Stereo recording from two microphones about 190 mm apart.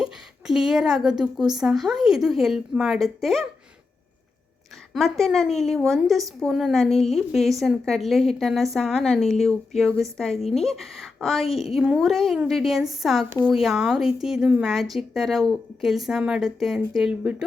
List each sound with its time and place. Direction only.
0.0 s a sound: 5° right (ahead or behind)
1.5 s a woman's voice: centre (ahead or behind)
4.9 s a woman's voice: centre (ahead or behind)